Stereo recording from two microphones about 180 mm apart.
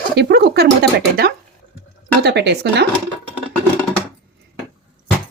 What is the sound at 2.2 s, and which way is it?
Speech, 70° right (ahead or behind).